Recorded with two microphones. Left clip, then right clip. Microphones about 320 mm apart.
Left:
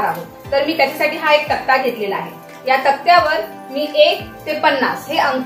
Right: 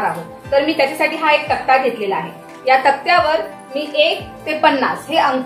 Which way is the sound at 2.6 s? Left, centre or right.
Right.